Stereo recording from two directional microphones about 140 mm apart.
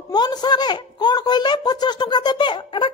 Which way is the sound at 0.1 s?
30° left (ahead or behind).